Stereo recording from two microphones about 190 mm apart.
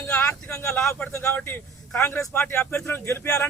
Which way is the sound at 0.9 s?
10° left (ahead or behind).